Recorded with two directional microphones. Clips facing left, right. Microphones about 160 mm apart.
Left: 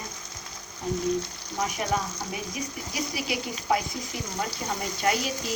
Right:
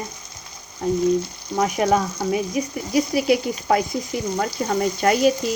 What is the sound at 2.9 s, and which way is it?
Speech, 50° right (ahead or behind).